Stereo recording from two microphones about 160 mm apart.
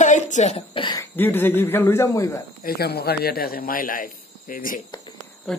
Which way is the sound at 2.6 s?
75° left (ahead or behind).